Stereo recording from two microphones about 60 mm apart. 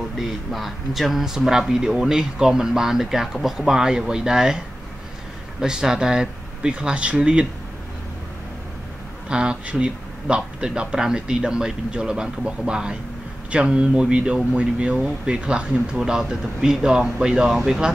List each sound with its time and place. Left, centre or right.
0.2 s speech: centre
5.6 s speech: centre
9.3 s speech: centre